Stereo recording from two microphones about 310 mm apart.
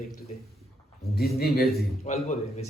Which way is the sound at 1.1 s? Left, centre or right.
Left.